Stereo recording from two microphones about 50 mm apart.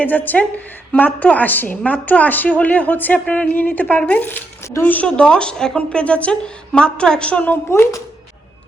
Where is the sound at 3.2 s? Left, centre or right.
Left.